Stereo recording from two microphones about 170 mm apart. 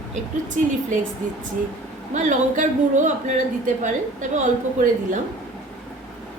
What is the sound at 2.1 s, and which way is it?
A woman's voice, 45° right (ahead or behind).